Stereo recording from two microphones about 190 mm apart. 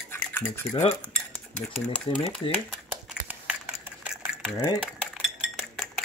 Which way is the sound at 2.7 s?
5° right (ahead or behind).